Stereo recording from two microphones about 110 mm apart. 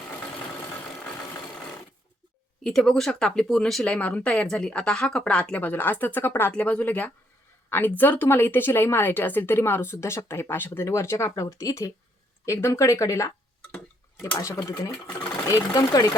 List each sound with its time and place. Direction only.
2.6 s speech: 5° left (ahead or behind); by 16.0 s 35° left (ahead or behind)